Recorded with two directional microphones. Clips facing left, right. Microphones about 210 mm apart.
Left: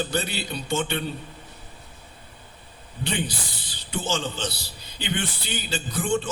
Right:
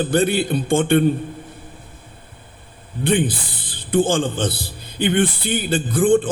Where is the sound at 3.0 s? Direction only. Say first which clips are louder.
Right 10 dB; 50° right (ahead or behind).